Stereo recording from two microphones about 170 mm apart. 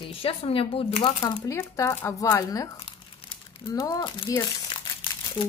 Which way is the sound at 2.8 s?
30° left (ahead or behind).